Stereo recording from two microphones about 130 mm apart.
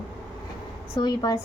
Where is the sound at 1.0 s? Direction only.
30° left (ahead or behind).